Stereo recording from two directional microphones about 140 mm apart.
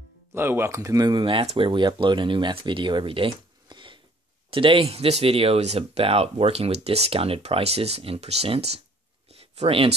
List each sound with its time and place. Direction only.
0.3 s speech: 15° right (ahead or behind); by 9.9 s 45° right (ahead or behind)